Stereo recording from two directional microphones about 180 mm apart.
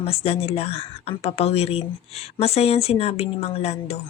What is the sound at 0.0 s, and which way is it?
Speech, 35° left (ahead or behind).